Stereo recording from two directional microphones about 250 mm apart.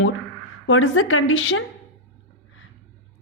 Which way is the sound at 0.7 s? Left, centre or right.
Left.